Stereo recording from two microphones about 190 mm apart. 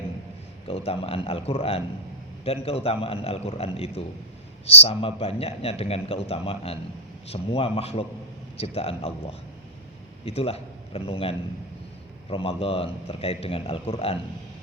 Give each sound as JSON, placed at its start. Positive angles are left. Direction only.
{"t": 0.7, "sound": "a man's voice", "side_deg": 30}